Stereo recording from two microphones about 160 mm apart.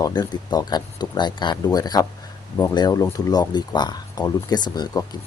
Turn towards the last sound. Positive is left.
turn(degrees=25)  # may be behind; listen again after turning